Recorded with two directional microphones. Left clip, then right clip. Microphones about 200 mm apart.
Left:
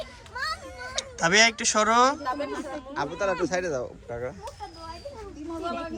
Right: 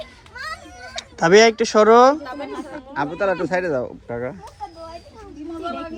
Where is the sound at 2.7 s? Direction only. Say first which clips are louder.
Right 9 dB; 40° right (ahead or behind).